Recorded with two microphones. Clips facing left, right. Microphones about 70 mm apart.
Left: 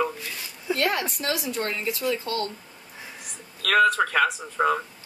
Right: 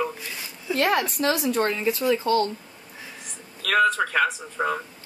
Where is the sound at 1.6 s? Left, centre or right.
Right.